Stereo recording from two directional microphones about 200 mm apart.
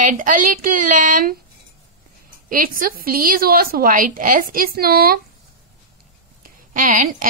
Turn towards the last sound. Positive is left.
turn(degrees=-40)  # may be behind; listen again after turning